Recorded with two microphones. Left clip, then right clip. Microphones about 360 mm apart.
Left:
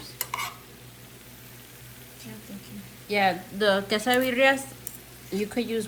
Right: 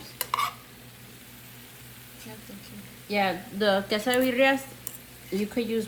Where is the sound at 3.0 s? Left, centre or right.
Left.